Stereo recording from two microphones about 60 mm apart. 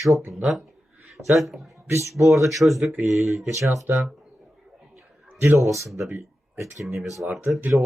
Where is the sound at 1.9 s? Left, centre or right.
Right.